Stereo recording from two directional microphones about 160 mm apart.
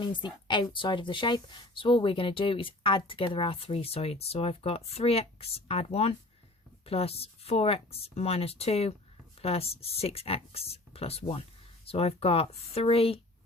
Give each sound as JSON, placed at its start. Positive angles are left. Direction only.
{"t": 0.0, "sound": "speech", "side_deg": 30}